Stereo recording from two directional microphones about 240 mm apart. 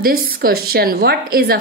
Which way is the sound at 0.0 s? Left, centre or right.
Right.